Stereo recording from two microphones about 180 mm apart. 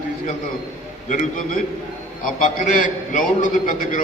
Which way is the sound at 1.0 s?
45° left (ahead or behind).